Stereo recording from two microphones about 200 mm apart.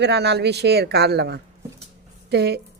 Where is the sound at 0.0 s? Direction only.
55° right (ahead or behind).